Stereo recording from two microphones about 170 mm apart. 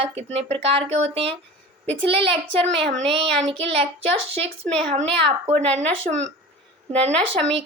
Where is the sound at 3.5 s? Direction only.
35° right (ahead or behind).